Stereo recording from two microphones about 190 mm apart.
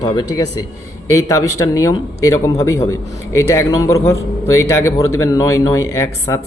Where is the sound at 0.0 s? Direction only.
20° left (ahead or behind).